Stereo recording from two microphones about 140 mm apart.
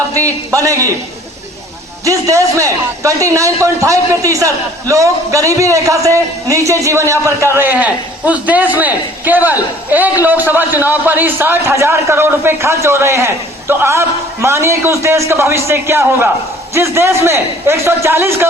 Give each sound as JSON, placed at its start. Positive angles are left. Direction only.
{"t": 0.1, "sound": "a man's voice", "side_deg": -25}
{"t": 2.0, "sound": "a man's voice", "side_deg": -25}